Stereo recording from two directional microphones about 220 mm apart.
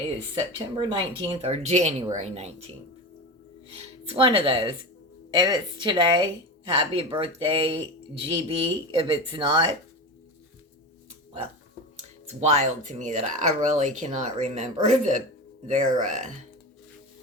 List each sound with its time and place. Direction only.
0.8 s speech: 25° right (ahead or behind)
4.1 s speech: 25° right (ahead or behind)
12.4 s speech: 30° right (ahead or behind)